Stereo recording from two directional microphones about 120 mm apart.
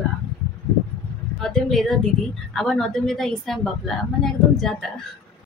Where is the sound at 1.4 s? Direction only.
5° left (ahead or behind).